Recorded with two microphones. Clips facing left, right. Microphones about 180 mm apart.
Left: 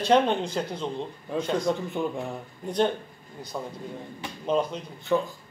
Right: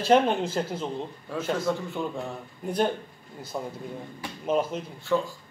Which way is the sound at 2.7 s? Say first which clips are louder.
Left 1 dB; 5° right (ahead or behind).